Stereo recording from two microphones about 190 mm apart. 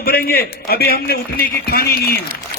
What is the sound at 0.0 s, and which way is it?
A man's voice, 50° left (ahead or behind).